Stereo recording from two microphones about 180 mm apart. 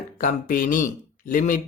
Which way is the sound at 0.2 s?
50° left (ahead or behind).